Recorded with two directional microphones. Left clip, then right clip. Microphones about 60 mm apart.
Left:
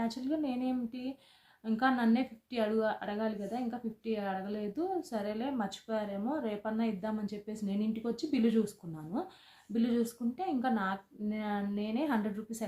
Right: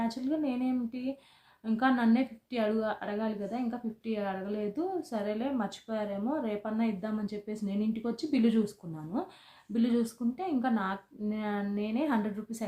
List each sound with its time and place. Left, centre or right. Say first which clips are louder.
0.0 s a woman's voice: right 2 dB; centre